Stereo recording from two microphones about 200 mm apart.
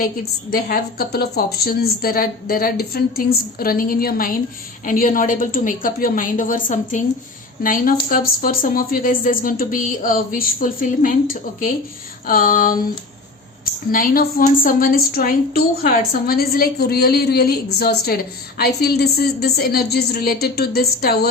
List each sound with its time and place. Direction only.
0.0 s a woman's voice: 45° left (ahead or behind)
13.9 s a woman's voice: 45° left (ahead or behind)